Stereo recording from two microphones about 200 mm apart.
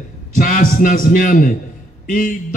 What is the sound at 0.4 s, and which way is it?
A man's voice, 45° left (ahead or behind).